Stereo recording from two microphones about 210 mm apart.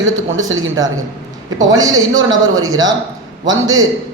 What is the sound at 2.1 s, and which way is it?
Speech, 65° right (ahead or behind).